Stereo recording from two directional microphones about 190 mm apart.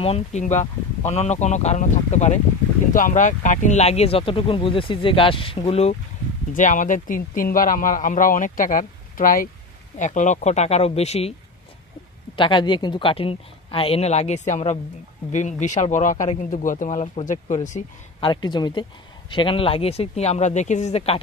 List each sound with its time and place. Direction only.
0.0 s speech: 35° left (ahead or behind)
6.5 s speech: 45° left (ahead or behind)
12.4 s speech: 25° left (ahead or behind)
18.2 s speech: 25° left (ahead or behind)